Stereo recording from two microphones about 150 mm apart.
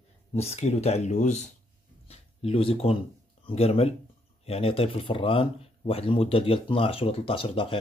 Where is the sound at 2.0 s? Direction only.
40° left (ahead or behind).